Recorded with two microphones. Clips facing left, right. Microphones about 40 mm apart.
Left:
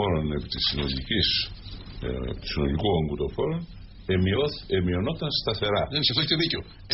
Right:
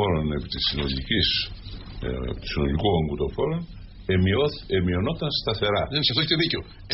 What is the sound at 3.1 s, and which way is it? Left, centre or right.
Speech, right.